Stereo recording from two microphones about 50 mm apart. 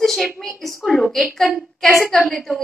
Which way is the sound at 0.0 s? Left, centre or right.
Centre.